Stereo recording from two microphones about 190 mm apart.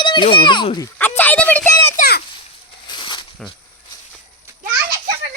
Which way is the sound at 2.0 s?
55° left (ahead or behind).